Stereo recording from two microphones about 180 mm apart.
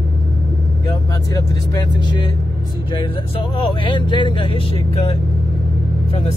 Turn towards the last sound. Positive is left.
turn(degrees=30)  # may be behind; listen again after turning